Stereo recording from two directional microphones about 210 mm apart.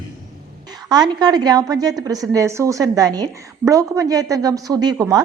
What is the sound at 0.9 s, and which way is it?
A woman's voice, 20° right (ahead or behind).